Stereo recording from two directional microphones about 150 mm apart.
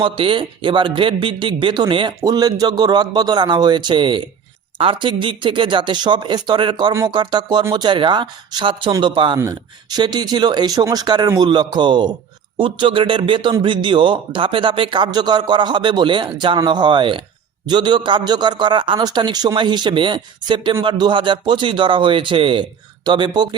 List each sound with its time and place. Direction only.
0.0 s a man's voice: 35° right (ahead or behind)